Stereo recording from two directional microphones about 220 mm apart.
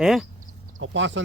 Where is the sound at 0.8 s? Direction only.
55° right (ahead or behind).